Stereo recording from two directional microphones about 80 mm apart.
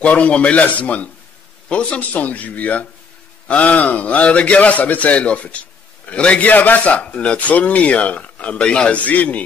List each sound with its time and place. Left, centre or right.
0.0 s a man's voice: centre